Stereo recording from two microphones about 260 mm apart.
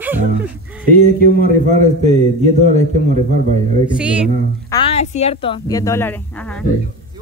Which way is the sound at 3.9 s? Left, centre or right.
Centre.